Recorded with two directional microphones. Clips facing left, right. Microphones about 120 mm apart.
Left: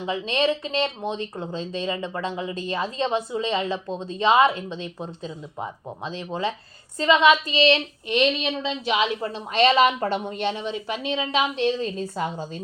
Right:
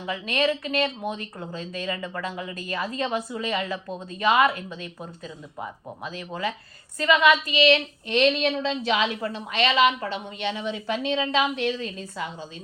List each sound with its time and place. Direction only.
0.0 s speech: 25° left (ahead or behind)
6.1 s speech: 25° left (ahead or behind)
8.1 s speech: 5° left (ahead or behind)
8.9 s a woman's voice: 25° left (ahead or behind); by 10.6 s 40° left (ahead or behind)
10.8 s speech: 15° left (ahead or behind); by 12.5 s 40° left (ahead or behind)